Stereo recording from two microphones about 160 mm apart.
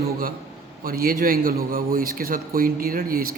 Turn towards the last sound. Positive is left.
turn(degrees=-65)  # may be behind; listen again after turning